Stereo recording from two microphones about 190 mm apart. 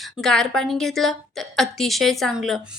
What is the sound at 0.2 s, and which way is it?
A woman's voice, centre (ahead or behind).